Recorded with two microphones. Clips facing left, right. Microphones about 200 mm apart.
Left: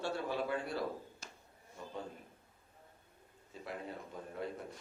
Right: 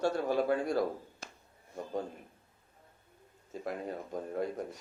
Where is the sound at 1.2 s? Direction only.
60° right (ahead or behind).